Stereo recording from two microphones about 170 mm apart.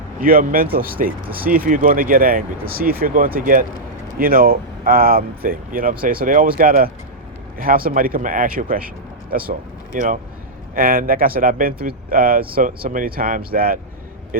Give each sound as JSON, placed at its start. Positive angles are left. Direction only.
{"t": 0.2, "sound": "speech", "side_deg": -55}